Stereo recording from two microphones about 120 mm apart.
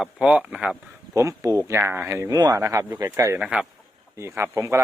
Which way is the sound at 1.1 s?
25° right (ahead or behind).